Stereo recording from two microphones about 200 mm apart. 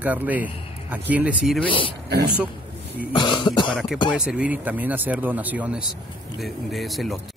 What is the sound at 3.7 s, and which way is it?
A man's voice, 5° left (ahead or behind).